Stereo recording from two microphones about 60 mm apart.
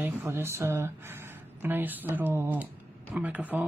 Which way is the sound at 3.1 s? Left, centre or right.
Right.